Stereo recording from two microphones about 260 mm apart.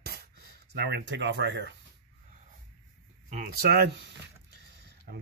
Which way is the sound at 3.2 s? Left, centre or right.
Right.